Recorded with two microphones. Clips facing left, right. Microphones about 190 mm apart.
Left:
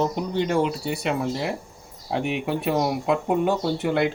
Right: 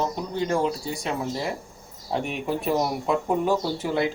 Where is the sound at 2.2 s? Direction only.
75° left (ahead or behind).